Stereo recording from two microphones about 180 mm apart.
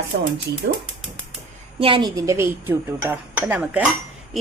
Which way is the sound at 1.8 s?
25° right (ahead or behind).